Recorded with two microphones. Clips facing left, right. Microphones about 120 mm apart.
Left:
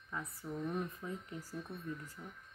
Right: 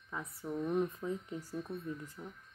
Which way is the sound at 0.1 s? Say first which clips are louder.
Right 3 dB; 15° right (ahead or behind).